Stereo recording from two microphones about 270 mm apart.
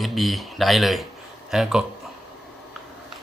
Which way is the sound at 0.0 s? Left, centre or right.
Centre.